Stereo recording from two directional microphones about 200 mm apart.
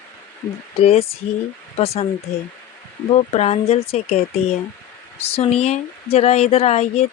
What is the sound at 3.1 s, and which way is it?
Speech, 35° left (ahead or behind).